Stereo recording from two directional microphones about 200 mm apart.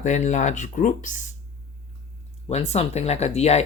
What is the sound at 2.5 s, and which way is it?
Speech, 30° left (ahead or behind).